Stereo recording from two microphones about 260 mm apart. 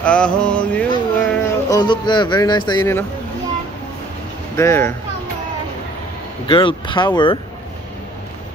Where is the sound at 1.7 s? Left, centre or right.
Centre.